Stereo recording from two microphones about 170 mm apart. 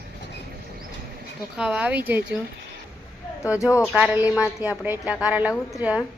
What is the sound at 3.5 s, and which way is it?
Speech, 20° left (ahead or behind).